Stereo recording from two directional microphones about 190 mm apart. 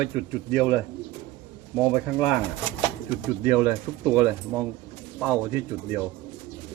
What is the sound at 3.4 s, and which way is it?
Speech, 10° right (ahead or behind).